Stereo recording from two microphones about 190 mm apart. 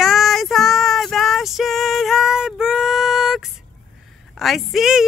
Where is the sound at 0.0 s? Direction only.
Centre (ahead or behind).